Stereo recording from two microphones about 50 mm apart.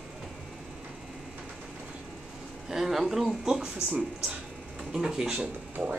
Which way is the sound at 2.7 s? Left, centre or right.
Centre.